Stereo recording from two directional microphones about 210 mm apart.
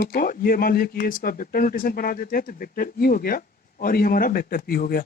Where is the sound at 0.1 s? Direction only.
45° left (ahead or behind).